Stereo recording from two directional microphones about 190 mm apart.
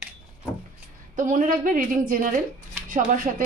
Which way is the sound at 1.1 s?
40° right (ahead or behind).